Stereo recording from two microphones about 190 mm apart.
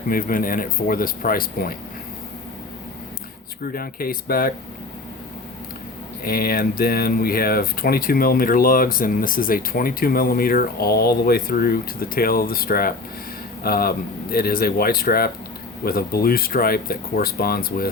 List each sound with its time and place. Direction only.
0.1 s speech: 50° left (ahead or behind)
3.6 s speech: 50° left (ahead or behind)
6.2 s speech: 50° left (ahead or behind)